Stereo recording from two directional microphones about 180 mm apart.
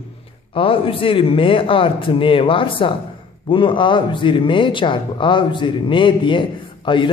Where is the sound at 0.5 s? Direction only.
30° left (ahead or behind).